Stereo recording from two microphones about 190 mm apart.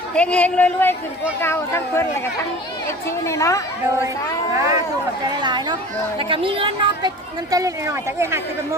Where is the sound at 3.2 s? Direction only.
15° left (ahead or behind).